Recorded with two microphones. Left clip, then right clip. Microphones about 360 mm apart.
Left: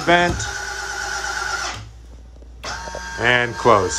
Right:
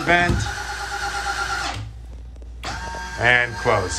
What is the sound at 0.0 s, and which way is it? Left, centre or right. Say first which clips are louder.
Speech: left 2 dB; centre.